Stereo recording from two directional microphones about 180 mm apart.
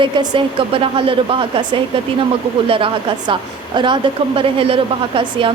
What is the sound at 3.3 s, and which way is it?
A woman's voice, 25° right (ahead or behind).